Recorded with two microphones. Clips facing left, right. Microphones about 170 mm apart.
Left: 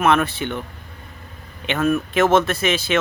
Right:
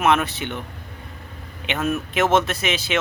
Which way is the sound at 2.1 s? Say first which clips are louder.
Left 1 dB; 20° right (ahead or behind).